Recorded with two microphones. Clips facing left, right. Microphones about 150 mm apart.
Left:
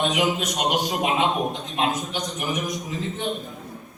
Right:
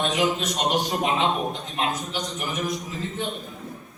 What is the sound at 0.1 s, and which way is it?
A man's voice, 15° left (ahead or behind).